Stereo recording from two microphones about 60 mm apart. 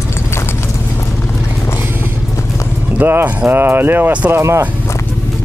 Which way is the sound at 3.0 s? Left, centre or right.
Right.